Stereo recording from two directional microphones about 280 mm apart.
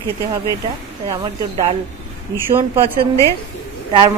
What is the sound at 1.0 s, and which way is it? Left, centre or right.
Speech, centre.